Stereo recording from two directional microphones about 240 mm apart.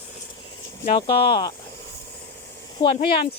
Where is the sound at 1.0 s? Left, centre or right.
Centre.